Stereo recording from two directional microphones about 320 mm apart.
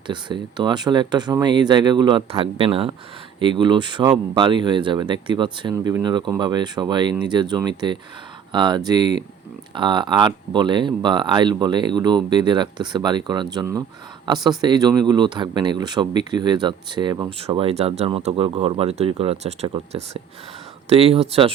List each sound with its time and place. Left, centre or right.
0.1 s speech: centre